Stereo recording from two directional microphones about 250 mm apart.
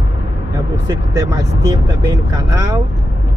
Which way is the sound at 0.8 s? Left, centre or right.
Centre.